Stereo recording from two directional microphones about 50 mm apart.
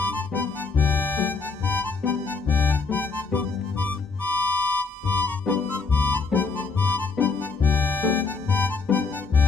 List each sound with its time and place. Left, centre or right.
0.0 s music: left